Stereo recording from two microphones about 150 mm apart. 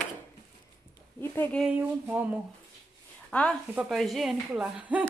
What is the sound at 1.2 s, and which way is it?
Speech, 15° left (ahead or behind).